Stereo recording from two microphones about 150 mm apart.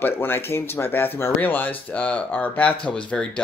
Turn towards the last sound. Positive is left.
turn(degrees=5)  # may be behind; listen again after turning